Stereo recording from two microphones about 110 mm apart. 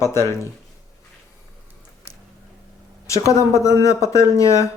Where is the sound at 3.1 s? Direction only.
30° left (ahead or behind).